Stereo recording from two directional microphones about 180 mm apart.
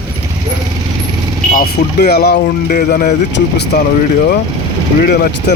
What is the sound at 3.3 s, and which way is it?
Speech, 70° left (ahead or behind).